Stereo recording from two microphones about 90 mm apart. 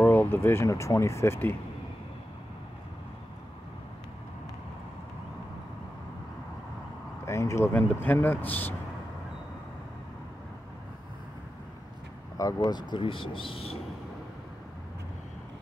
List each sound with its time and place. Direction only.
0.0 s speech: 25° left (ahead or behind)
7.2 s a sound: 30° left (ahead or behind)
7.7 s speech: 20° left (ahead or behind)
12.4 s speech: 45° left (ahead or behind); by 13.7 s 85° left